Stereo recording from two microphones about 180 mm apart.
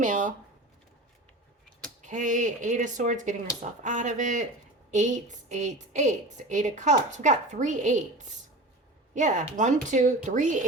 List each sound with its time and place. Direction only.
0.0 s speech: 45° right (ahead or behind)
2.0 s a woman's voice: 45° right (ahead or behind)